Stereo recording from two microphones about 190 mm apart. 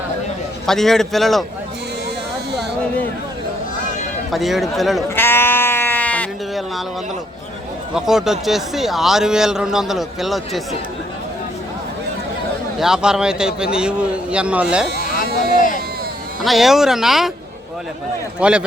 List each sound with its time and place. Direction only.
0.6 s a man's voice: centre (ahead or behind)
4.3 s a man's voice: centre (ahead or behind)
5.1 s sheep: 10° left (ahead or behind)
7.9 s a man's voice: centre (ahead or behind)
12.8 s a man's voice: 5° right (ahead or behind)
14.9 s a sound: 45° left (ahead or behind)
16.4 s a man's voice: centre (ahead or behind)
18.3 s a man's voice: 5° right (ahead or behind)